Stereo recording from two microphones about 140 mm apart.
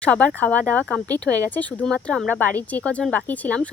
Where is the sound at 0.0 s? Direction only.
10° left (ahead or behind).